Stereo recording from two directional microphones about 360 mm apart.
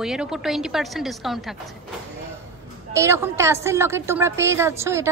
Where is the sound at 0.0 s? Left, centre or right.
Centre.